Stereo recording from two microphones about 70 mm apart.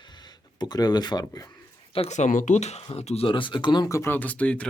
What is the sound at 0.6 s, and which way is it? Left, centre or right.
Speech, left.